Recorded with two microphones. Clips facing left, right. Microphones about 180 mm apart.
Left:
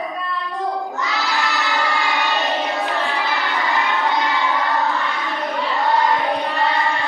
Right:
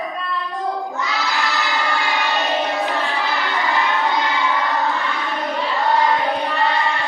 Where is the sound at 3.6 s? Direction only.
Centre (ahead or behind).